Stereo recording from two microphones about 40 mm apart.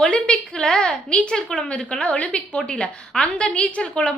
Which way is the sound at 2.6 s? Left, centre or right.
Centre.